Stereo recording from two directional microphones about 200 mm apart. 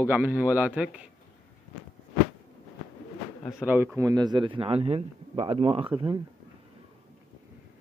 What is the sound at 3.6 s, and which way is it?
A man's voice, 10° right (ahead or behind).